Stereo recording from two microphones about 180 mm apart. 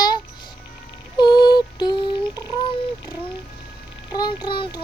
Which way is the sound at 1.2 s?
25° left (ahead or behind).